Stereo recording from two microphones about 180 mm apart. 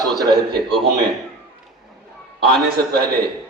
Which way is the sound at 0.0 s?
20° right (ahead or behind).